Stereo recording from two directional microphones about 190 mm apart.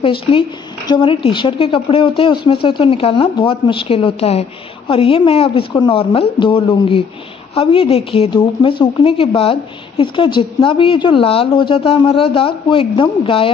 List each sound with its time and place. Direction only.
0.0 s speech: 25° left (ahead or behind)